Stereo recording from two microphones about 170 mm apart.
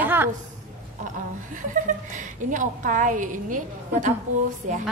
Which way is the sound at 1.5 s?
50° right (ahead or behind).